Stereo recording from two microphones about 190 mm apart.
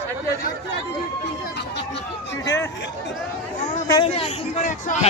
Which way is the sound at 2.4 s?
15° left (ahead or behind).